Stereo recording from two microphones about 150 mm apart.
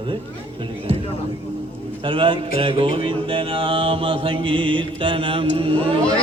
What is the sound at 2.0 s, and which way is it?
Mantra, 35° right (ahead or behind).